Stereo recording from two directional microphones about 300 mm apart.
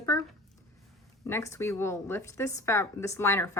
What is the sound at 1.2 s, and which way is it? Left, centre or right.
Speech, centre.